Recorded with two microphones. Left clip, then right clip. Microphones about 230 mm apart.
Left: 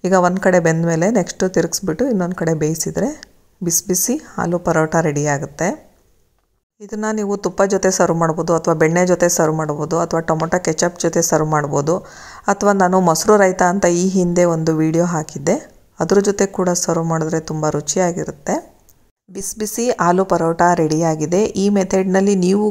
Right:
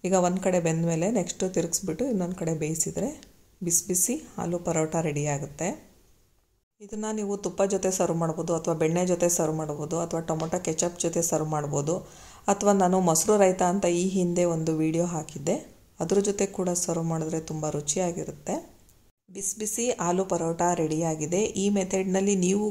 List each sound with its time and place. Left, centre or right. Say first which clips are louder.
0.0 s a woman's voice: left 10 dB; left
6.9 s a woman's voice: left 10 dB; left
19.6 s a woman's voice: left 12 dB; left